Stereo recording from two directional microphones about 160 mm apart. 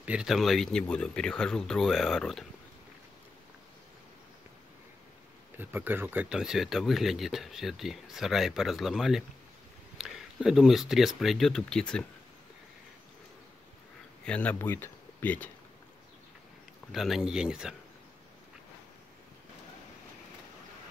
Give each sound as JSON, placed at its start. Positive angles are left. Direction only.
{"t": 0.0, "sound": "speech", "side_deg": -5}
{"t": 5.6, "sound": "speech", "side_deg": -10}
{"t": 14.2, "sound": "speech", "side_deg": 10}
{"t": 16.9, "sound": "speech", "side_deg": 0}